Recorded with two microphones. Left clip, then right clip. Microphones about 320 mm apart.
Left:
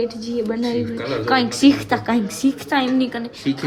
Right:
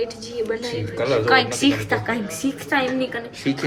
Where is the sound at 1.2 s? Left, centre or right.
Left.